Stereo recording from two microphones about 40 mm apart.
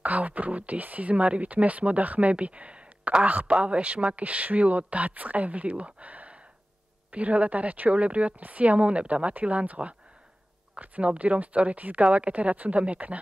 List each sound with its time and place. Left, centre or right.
0.0 s speech: right
3.3 s speech: right